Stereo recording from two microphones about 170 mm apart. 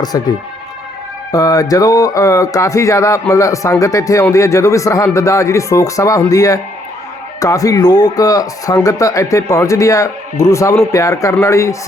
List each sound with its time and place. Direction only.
0.0 s a man's voice: 25° left (ahead or behind)